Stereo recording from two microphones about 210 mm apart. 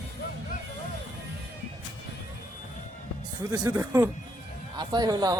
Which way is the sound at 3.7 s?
10° right (ahead or behind).